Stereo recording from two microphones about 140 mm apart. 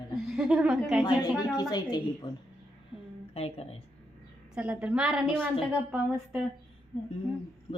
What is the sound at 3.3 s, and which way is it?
Speech, 45° left (ahead or behind).